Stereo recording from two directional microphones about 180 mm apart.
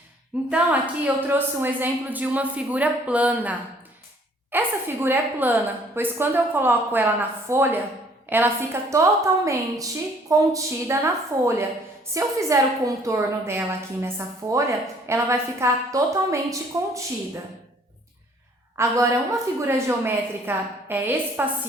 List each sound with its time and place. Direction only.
0.5 s a woman's voice: 10° right (ahead or behind)
4.5 s a woman's voice: 10° right (ahead or behind)
18.8 s a woman's voice: 15° right (ahead or behind)